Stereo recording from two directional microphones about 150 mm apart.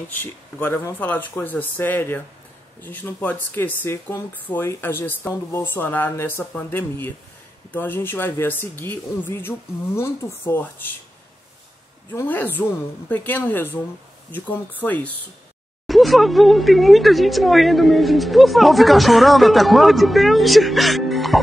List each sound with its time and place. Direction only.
0.1 s speech: 15° left (ahead or behind)
12.1 s speech: 15° left (ahead or behind)
15.9 s speech: centre (ahead or behind)